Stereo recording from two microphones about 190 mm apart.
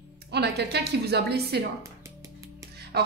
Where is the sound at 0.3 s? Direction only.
60° right (ahead or behind).